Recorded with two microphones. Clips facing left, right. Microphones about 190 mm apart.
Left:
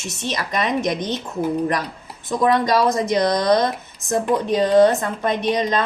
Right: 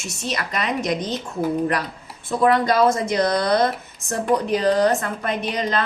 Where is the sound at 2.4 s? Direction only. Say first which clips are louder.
Right 1 dB; 20° left (ahead or behind).